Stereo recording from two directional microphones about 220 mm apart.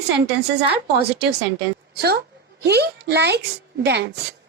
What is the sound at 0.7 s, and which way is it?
A woman's voice, 50° right (ahead or behind).